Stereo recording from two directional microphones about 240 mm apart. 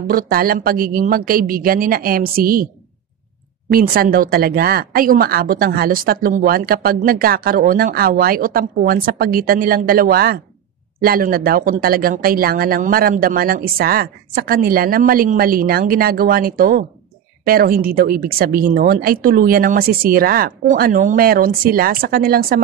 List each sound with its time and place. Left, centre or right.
0.0 s speech: right
3.7 s speech: right